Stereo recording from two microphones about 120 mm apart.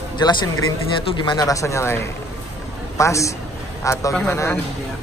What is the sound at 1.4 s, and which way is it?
Speech, 25° left (ahead or behind).